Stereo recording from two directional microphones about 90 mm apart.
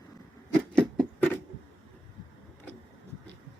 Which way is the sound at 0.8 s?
10° left (ahead or behind).